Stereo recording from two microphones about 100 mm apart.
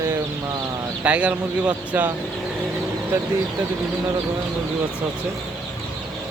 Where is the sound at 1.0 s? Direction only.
15° right (ahead or behind).